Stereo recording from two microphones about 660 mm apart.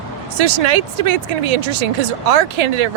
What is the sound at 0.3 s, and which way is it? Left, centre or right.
Speech, right.